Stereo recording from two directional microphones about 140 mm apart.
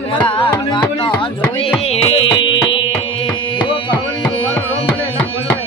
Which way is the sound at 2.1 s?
35° left (ahead or behind).